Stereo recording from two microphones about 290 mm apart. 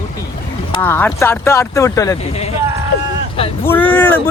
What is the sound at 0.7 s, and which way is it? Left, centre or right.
Speech, centre.